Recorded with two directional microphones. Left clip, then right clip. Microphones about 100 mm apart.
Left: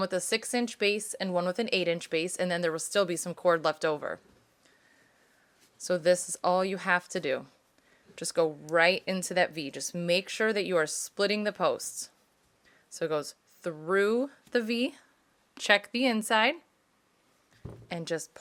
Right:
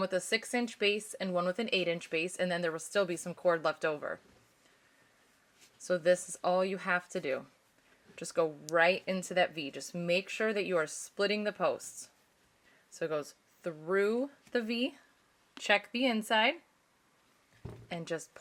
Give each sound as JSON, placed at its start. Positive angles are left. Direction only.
{"t": 0.0, "sound": "speech", "side_deg": 20}
{"t": 5.8, "sound": "speech", "side_deg": 20}
{"t": 8.1, "sound": "speech", "side_deg": 20}
{"t": 17.8, "sound": "a woman's voice", "side_deg": 20}